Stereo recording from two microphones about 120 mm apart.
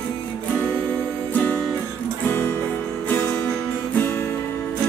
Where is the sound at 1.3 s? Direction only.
15° left (ahead or behind).